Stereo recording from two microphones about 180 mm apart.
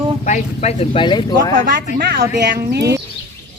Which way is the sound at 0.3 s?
40° left (ahead or behind).